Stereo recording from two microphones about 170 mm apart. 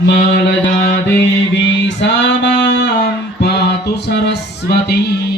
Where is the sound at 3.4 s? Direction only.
80° left.